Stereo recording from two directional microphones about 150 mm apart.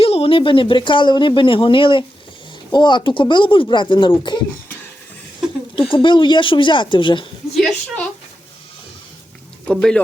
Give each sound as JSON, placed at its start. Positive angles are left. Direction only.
{"t": 0.0, "sound": "speech", "side_deg": 40}
{"t": 5.9, "sound": "speech", "side_deg": 35}
{"t": 7.5, "sound": "a woman's voice", "side_deg": 5}
{"t": 9.6, "sound": "speech", "side_deg": 5}